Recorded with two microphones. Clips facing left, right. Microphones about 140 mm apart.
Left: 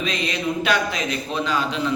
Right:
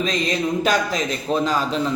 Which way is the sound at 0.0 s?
40° right (ahead or behind).